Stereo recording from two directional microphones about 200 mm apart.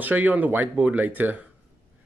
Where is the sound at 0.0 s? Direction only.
10° right (ahead or behind).